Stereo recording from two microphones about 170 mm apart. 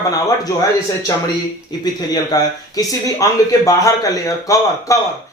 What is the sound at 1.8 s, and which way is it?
A man's voice, 25° left (ahead or behind).